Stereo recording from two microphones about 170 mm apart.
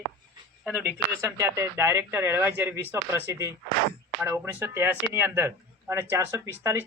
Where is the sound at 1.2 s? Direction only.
20° right (ahead or behind).